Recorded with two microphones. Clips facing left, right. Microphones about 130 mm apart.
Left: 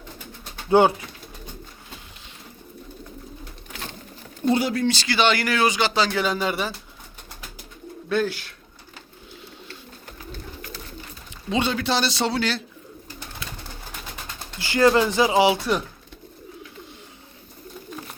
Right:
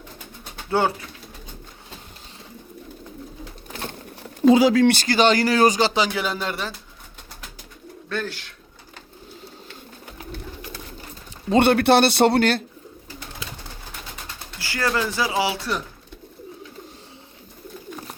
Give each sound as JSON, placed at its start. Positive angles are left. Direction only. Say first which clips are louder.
{"t": 0.7, "sound": "speech", "louder": "left 5 dB", "side_deg": 20}
{"t": 4.6, "sound": "speech", "louder": "right 7 dB", "side_deg": -90}
{"t": 4.9, "sound": "speech", "louder": "right 3 dB", "side_deg": -40}
{"t": 6.1, "sound": "a man's voice", "louder": "left 2 dB", "side_deg": 0}
{"t": 8.1, "sound": "speech", "louder": "left 5 dB", "side_deg": 10}
{"t": 11.5, "sound": "a man's voice", "louder": "right 8 dB", "side_deg": -60}
{"t": 14.6, "sound": "speech", "louder": "left 6 dB", "side_deg": 20}